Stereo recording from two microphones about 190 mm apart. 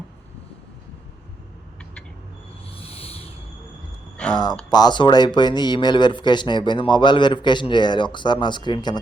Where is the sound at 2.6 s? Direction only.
30° left (ahead or behind).